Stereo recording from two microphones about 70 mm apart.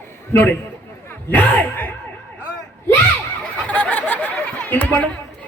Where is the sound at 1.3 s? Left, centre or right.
Left.